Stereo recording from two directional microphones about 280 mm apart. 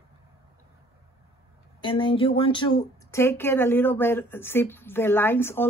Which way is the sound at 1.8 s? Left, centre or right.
Centre.